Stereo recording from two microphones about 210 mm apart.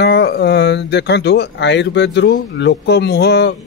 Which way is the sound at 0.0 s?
50° left (ahead or behind).